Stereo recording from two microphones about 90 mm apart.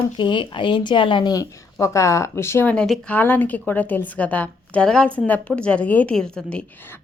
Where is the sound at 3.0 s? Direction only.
20° left (ahead or behind).